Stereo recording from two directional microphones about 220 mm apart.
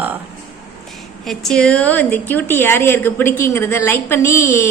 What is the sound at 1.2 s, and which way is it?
A woman's voice, centre (ahead or behind).